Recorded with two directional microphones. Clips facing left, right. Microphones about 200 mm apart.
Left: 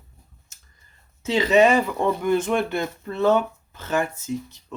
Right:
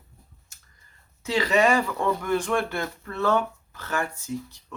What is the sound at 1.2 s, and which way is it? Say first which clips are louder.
Speech: left 5 dB; 20° left (ahead or behind).